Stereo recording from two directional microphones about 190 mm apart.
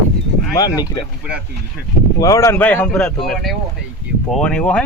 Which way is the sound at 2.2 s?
15° left (ahead or behind).